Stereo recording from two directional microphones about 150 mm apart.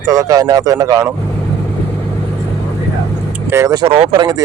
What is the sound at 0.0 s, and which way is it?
Speech, 25° right (ahead or behind).